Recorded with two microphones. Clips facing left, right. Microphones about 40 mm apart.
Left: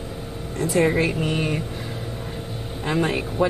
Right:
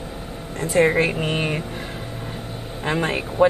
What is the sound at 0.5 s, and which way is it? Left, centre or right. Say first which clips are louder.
Speech: right 2 dB; right.